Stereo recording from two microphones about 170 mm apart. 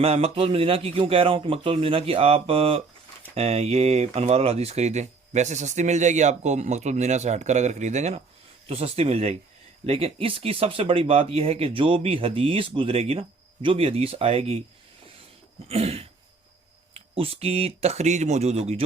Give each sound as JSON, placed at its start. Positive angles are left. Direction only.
{"t": 0.0, "sound": "speech", "side_deg": -35}
{"t": 15.6, "sound": "speech", "side_deg": -35}